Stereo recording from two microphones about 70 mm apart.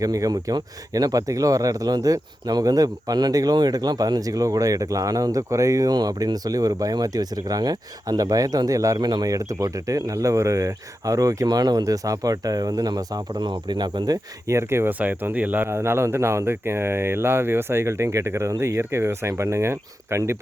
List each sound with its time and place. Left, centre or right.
0.0 s speech: right
5.9 s speech: right
9.0 s speech: right
9.3 s speech: right
11.4 s speech: right
13.4 s speech: right
14.4 s speech: right
14.9 s speech: right
15.7 s speech: right